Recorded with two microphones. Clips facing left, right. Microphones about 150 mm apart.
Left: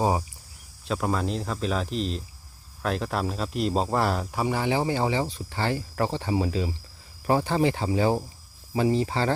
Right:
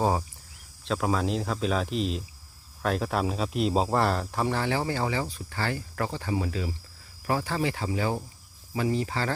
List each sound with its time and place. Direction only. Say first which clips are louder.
0.0 s speech: left 1 dB; 15° left (ahead or behind)
0.9 s speech: even; centre (ahead or behind); by 9.3 s 25° left (ahead or behind)